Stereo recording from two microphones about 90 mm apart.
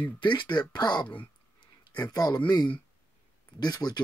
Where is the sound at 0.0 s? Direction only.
60° left (ahead or behind).